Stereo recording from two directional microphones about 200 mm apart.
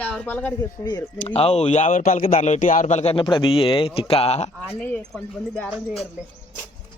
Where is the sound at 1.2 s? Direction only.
30° left (ahead or behind).